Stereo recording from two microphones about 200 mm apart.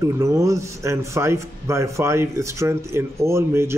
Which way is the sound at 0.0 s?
15° right (ahead or behind).